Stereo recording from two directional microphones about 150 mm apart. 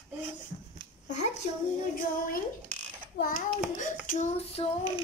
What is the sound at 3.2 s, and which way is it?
Child singing, 70° left (ahead or behind).